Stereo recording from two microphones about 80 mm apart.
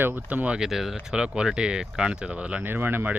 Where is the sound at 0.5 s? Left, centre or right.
Centre.